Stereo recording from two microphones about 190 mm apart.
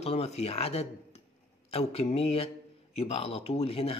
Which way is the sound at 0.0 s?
30° left (ahead or behind).